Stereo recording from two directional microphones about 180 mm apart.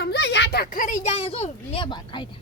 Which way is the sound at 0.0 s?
70° left (ahead or behind).